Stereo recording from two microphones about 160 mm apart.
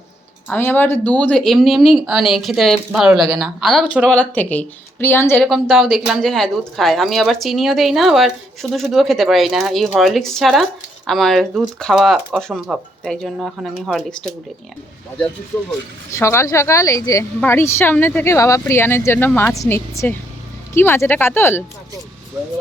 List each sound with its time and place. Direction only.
0.4 s speech: 10° left (ahead or behind); by 4.0 s 5° right (ahead or behind)
4.0 s a woman's voice: 10° left (ahead or behind)
5.4 s speech: centre (ahead or behind)
16.1 s a woman's voice: 15° left (ahead or behind)